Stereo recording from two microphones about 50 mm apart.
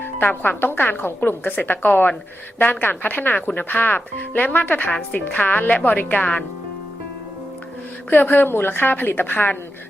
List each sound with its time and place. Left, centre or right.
0.0 s speech: left
8.1 s speech: left